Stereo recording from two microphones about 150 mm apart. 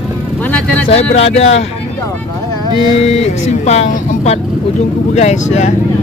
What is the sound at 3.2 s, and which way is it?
Speech, 45° left (ahead or behind).